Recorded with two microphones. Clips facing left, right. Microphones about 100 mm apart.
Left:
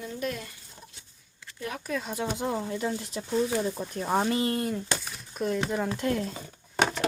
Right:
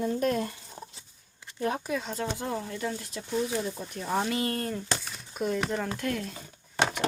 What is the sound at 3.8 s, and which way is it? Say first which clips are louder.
Speech: left 3 dB; 40° left (ahead or behind).